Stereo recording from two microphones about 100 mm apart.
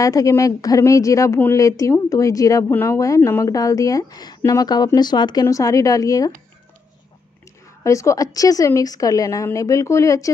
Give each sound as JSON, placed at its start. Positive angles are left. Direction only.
{"t": 0.0, "sound": "a woman's voice", "side_deg": 35}
{"t": 7.8, "sound": "a woman's voice", "side_deg": 30}